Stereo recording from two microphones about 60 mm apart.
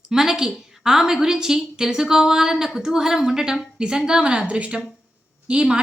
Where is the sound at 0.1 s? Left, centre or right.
Centre.